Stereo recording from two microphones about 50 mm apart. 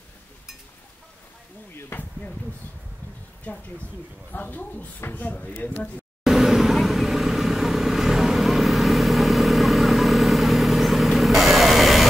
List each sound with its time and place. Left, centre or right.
1.9 s a sound: left
4.3 s speech: left
6.2 s vehicle: centre